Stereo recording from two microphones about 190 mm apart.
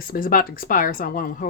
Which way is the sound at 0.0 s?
50° left (ahead or behind).